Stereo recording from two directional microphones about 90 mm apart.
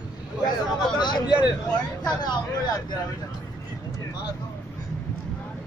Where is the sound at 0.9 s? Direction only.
55° left (ahead or behind).